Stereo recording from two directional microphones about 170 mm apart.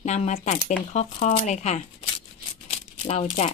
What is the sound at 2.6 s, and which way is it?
Rattle, 35° left (ahead or behind).